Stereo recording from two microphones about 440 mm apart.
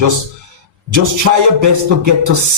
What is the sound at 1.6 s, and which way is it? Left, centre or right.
Speech, right.